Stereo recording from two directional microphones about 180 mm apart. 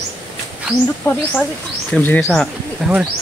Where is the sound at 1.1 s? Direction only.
15° left (ahead or behind); by 3.0 s centre (ahead or behind).